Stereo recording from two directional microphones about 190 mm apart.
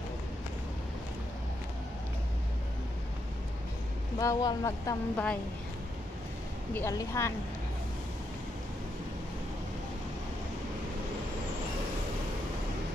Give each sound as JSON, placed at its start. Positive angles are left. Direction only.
{"t": 4.2, "sound": "speech", "side_deg": 20}
{"t": 6.7, "sound": "speech", "side_deg": 15}